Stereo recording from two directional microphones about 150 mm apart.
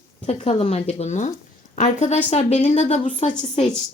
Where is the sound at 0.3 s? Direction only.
45° left (ahead or behind).